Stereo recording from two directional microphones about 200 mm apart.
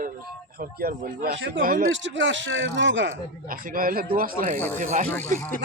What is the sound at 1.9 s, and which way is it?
Speech, 65° right (ahead or behind).